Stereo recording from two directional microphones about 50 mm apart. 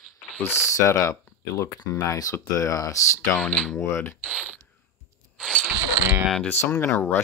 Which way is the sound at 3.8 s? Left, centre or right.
Left.